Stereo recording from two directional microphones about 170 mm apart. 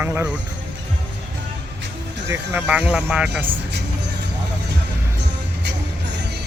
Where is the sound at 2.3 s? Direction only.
10° right (ahead or behind).